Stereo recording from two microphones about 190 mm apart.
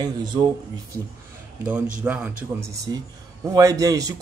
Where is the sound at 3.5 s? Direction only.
20° right (ahead or behind).